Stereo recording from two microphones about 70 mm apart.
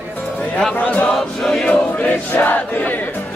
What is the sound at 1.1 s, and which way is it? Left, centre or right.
Music, centre.